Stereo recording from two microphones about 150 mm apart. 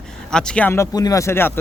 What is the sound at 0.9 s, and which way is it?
Speech, 25° left (ahead or behind).